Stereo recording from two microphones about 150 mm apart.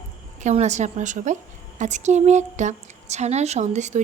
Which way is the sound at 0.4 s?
50° right (ahead or behind).